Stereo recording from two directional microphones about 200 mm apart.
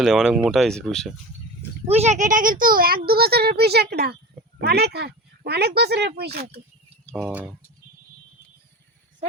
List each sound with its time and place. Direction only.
0.0 s speech: centre (ahead or behind)
1.9 s speech: 35° right (ahead or behind); by 6.6 s 55° right (ahead or behind)
7.0 s a sound: 5° left (ahead or behind)